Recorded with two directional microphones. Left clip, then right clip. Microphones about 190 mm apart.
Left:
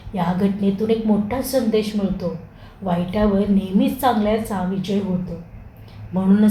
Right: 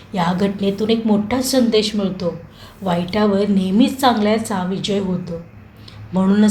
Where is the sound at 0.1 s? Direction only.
35° right (ahead or behind).